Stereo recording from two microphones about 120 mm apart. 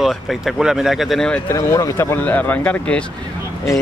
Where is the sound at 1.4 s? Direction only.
25° left (ahead or behind).